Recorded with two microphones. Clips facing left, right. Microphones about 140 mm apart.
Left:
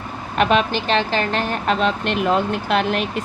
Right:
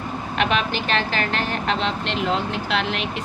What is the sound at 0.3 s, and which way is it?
Speech, 40° left (ahead or behind).